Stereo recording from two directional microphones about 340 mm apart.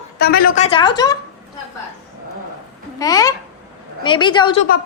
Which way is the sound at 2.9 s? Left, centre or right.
Centre.